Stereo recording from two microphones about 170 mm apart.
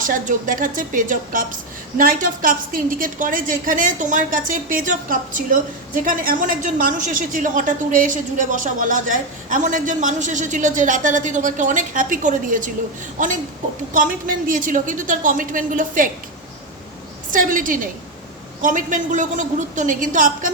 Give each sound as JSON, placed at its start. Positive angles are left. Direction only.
{"t": 0.0, "sound": "a woman's voice", "side_deg": -50}
{"t": 13.9, "sound": "a woman's voice", "side_deg": -55}
{"t": 17.3, "sound": "a woman's voice", "side_deg": -50}